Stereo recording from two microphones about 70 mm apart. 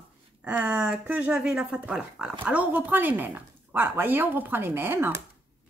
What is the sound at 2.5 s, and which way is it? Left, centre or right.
Speech, right.